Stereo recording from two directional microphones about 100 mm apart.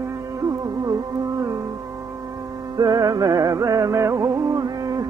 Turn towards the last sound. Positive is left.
turn(degrees=-35)  # may be behind; listen again after turning